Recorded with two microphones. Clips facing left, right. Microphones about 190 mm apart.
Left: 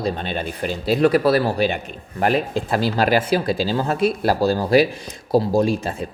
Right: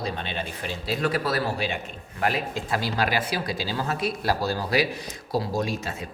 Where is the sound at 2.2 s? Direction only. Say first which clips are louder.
Left 7 dB; 30° left (ahead or behind).